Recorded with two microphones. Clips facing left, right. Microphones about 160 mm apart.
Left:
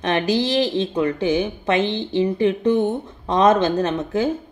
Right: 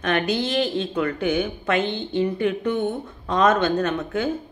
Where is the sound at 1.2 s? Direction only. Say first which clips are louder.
Left 3 dB; 30° left (ahead or behind).